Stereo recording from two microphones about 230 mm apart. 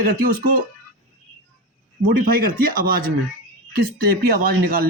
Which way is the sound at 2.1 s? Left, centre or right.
Right.